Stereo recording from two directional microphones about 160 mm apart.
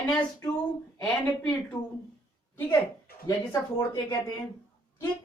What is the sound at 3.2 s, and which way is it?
Speech, 20° left (ahead or behind).